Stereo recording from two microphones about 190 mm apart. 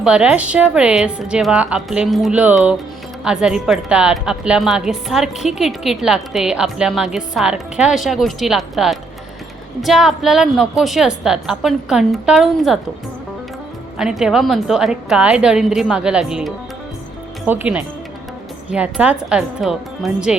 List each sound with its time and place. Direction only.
0.0 s a woman's voice: 5° right (ahead or behind)
14.0 s a woman's voice: centre (ahead or behind)